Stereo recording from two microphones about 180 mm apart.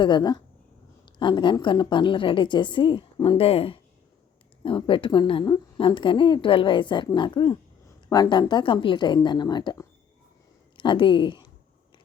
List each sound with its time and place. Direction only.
0.0 s a woman's voice: 25° left (ahead or behind)